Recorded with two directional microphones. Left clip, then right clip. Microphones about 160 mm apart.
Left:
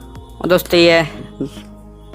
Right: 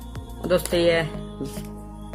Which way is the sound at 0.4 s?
55° left (ahead or behind).